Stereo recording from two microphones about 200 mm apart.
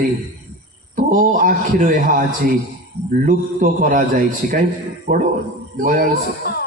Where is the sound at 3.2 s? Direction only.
40° right (ahead or behind).